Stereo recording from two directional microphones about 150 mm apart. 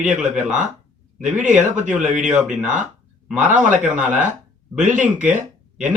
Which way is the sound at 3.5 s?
55° right (ahead or behind).